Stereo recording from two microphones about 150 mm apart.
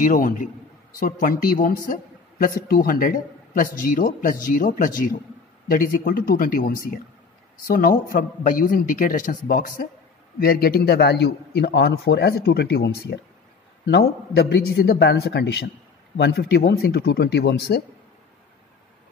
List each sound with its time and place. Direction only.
0.0 s a man's voice: 60° left (ahead or behind)
10.4 s a man's voice: 85° left